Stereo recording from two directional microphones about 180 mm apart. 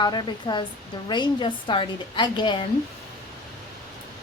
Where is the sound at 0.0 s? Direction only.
25° left (ahead or behind).